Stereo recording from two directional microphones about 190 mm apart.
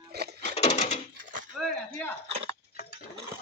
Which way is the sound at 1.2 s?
45° right (ahead or behind).